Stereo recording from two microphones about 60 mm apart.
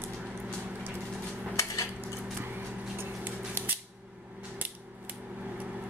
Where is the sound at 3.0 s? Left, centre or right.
Right.